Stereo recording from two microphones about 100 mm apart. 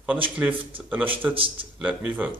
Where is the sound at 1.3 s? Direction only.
65° right (ahead or behind).